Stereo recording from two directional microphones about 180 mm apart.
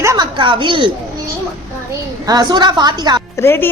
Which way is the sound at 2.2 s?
20° right (ahead or behind).